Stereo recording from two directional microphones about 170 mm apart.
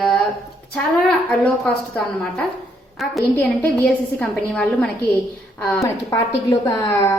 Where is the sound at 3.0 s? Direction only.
Centre (ahead or behind).